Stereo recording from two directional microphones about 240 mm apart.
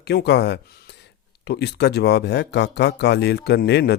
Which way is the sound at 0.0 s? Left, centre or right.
Left.